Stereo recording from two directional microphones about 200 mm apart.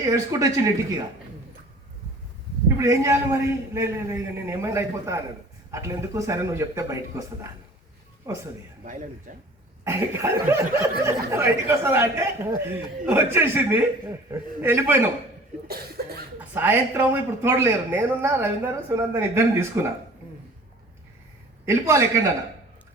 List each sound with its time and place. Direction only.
0.0 s speech: 15° right (ahead or behind)
2.6 s speech: 15° right (ahead or behind)
8.3 s speech: 15° right (ahead or behind)
8.8 s speech: 40° right (ahead or behind)
9.8 s speech: 15° right (ahead or behind)
16.0 s speech: 50° right (ahead or behind)
16.6 s speech: 10° right (ahead or behind)
21.7 s speech: 15° right (ahead or behind)